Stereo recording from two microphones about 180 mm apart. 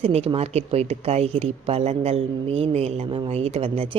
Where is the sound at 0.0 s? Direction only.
35° right (ahead or behind).